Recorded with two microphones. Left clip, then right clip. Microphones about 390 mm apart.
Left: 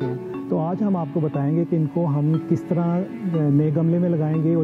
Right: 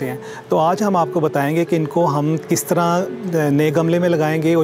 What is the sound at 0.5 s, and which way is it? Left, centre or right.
Speech, centre.